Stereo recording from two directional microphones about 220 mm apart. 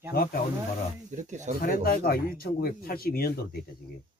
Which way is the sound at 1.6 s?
40° left (ahead or behind).